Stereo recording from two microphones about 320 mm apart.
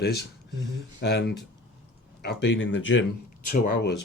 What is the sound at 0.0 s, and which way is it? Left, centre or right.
Speech, left.